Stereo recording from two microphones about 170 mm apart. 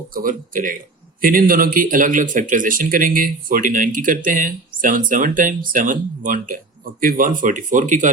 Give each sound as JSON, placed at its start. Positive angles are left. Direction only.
{"t": 0.1, "sound": "speech", "side_deg": -55}